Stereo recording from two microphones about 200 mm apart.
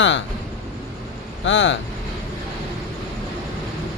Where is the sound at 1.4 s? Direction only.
70° left (ahead or behind).